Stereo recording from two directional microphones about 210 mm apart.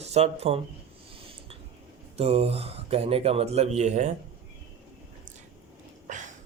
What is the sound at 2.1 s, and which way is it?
Speech, 30° right (ahead or behind).